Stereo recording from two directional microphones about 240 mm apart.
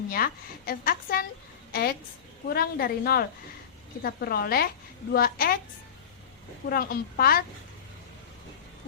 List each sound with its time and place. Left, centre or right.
0.1 s speech: left
6.7 s speech: left